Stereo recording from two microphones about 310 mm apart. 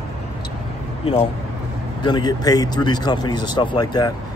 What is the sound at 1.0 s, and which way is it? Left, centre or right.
Speech, centre.